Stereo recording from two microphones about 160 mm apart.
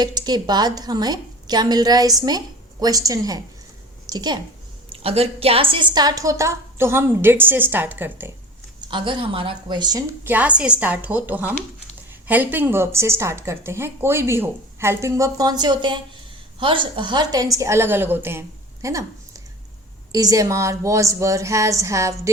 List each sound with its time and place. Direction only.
0.0 s a woman's voice: 25° right (ahead or behind)
4.9 s a woman's voice: 40° right (ahead or behind); by 8.3 s 15° right (ahead or behind)
8.9 s a woman's voice: 30° right (ahead or behind)
10.2 s a woman's voice: 10° right (ahead or behind)